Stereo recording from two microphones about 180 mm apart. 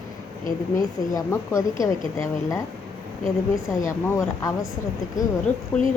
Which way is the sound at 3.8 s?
15° left (ahead or behind).